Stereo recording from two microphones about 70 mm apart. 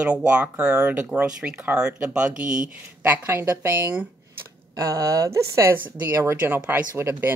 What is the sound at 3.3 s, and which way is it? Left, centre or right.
Speech, right.